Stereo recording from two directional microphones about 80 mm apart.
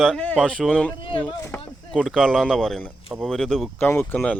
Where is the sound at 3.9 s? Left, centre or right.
Left.